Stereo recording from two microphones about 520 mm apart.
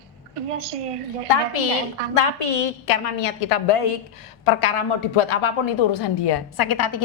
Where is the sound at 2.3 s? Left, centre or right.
Left.